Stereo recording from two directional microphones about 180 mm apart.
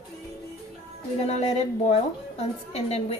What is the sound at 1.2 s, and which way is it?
A woman's voice, 35° left (ahead or behind).